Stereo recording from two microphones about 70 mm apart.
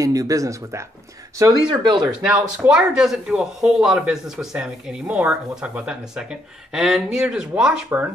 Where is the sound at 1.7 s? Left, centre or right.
Right.